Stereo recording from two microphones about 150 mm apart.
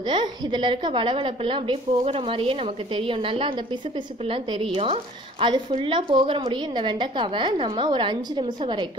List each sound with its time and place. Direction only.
0.0 s a woman's voice: 30° right (ahead or behind)